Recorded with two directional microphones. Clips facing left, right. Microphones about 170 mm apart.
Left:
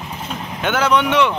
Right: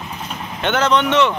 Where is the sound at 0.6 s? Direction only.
10° left (ahead or behind).